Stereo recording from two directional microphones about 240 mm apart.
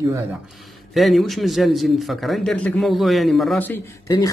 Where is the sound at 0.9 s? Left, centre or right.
Centre.